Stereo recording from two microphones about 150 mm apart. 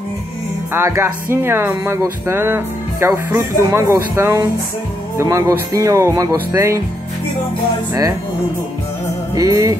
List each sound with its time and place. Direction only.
0.7 s speech: 20° right (ahead or behind)
9.3 s speech: 20° right (ahead or behind)